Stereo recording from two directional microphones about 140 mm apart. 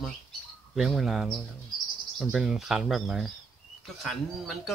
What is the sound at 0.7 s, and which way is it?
Speech, centre (ahead or behind).